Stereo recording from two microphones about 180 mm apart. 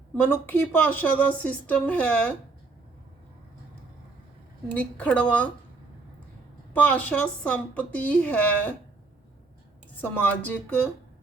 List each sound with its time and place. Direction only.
0.3 s a woman's voice: 10° left (ahead or behind)
4.7 s a woman's voice: 5° left (ahead or behind)
6.7 s a woman's voice: 10° left (ahead or behind)
10.0 s a woman's voice: 10° left (ahead or behind)